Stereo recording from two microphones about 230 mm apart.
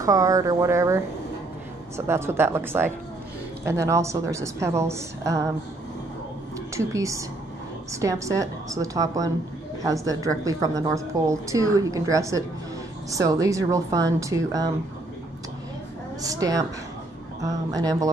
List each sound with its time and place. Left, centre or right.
0.0 s a woman's voice: centre
2.0 s a woman's voice: centre
6.7 s a woman's voice: centre
16.2 s a woman's voice: centre